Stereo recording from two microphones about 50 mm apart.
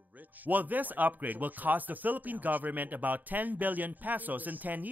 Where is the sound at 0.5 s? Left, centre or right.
Right.